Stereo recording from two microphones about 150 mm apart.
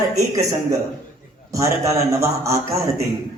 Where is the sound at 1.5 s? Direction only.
20° right (ahead or behind).